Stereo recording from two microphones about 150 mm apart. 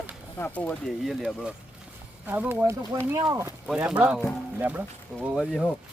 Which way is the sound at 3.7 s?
5° right (ahead or behind).